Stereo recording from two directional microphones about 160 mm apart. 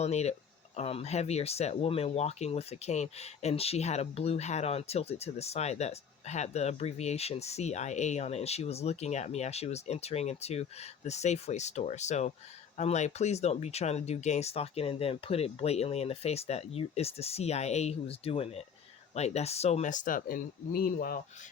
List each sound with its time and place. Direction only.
0.0 s speech: 40° left (ahead or behind); by 21.2 s 65° left (ahead or behind)